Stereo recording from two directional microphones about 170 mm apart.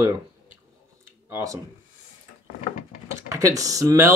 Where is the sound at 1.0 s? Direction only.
15° right (ahead or behind).